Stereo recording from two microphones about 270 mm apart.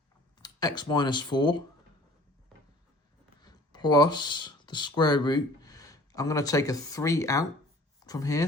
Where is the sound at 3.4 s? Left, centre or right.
Centre.